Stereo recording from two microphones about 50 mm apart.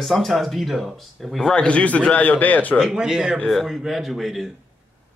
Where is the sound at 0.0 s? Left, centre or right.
Centre.